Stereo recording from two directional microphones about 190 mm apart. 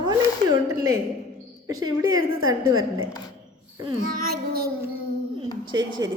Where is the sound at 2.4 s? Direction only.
90° right.